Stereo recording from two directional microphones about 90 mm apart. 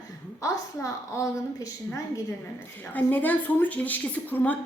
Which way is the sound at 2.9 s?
20° left (ahead or behind).